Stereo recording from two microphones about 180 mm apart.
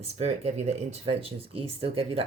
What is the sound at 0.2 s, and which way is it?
Speech, 35° right (ahead or behind).